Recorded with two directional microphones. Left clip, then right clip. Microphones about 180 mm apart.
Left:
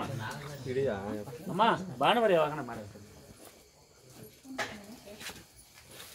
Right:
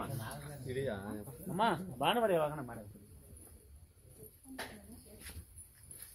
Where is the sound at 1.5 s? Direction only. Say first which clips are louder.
Left 6 dB; 25° right (ahead or behind).